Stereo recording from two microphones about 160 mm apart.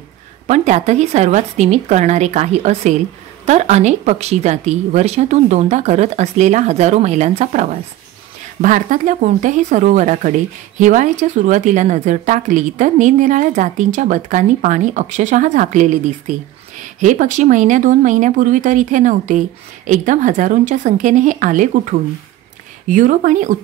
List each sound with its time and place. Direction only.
0.5 s a woman's voice: 45° right (ahead or behind)
22.8 s a woman's voice: 55° right (ahead or behind)